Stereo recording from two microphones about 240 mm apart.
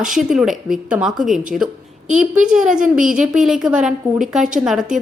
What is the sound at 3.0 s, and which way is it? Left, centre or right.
Speech, right.